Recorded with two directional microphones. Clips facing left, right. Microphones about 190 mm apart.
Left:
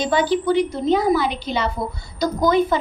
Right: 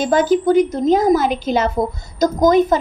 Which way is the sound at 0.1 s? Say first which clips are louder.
Right 6 dB; 45° right (ahead or behind).